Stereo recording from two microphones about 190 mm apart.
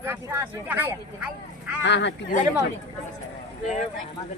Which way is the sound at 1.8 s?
70° left (ahead or behind).